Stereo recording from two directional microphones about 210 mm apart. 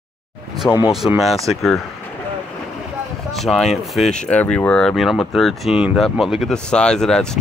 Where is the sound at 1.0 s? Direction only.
Centre (ahead or behind).